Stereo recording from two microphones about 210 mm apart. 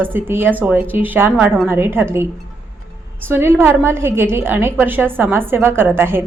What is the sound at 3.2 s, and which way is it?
A woman's voice, 10° right (ahead or behind).